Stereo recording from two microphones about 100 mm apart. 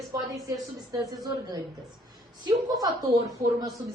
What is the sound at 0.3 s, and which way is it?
A woman's voice, 35° right (ahead or behind).